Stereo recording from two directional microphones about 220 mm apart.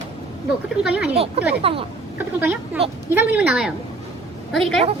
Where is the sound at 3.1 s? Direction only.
10° right (ahead or behind).